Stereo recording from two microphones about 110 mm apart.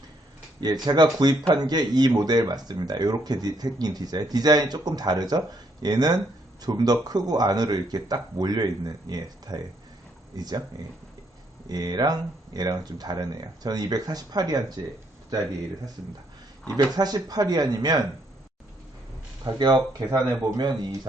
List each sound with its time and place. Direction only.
0.6 s speech: 35° right (ahead or behind)
11.7 s speech: 35° right (ahead or behind)
16.7 s speech: 35° right (ahead or behind)
19.5 s speech: 40° right (ahead or behind)